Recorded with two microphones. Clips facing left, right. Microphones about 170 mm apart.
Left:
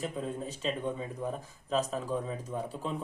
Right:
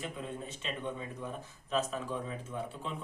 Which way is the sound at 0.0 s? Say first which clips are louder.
Left 5 dB; 35° left (ahead or behind).